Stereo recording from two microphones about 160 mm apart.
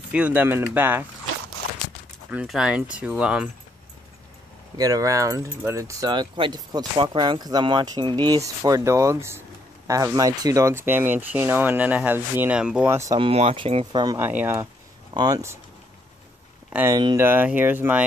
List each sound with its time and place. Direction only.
0.1 s speech: 10° right (ahead or behind)
2.3 s speech: 5° right (ahead or behind)
4.7 s speech: 20° right (ahead or behind); by 12.9 s 5° right (ahead or behind)
12.9 s speech: 20° right (ahead or behind)
13.2 s speech: 40° right (ahead or behind)
14.1 s speech: 10° right (ahead or behind)
16.9 s speech: 25° right (ahead or behind)
17.3 s speech: 10° right (ahead or behind)